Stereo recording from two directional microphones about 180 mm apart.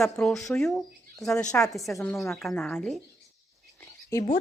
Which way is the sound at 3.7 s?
15° left (ahead or behind).